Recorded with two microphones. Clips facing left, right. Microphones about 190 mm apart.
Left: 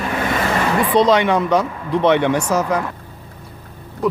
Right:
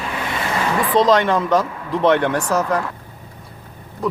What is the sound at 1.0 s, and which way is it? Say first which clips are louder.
Speech: even; centre (ahead or behind).